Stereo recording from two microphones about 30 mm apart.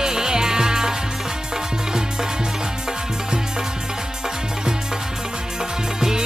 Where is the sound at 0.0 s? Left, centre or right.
Right.